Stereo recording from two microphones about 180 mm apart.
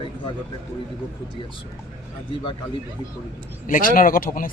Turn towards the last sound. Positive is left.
turn(degrees=50)  # may be behind; listen again after turning